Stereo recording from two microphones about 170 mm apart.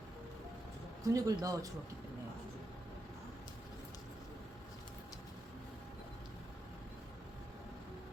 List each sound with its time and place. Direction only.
1.0 s speech: 20° right (ahead or behind)